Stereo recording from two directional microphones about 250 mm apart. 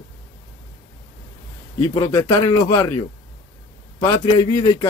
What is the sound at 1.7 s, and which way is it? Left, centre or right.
A man's voice, centre.